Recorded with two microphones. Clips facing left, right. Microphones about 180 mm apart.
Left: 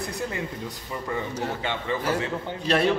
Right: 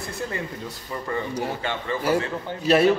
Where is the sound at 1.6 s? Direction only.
20° left (ahead or behind).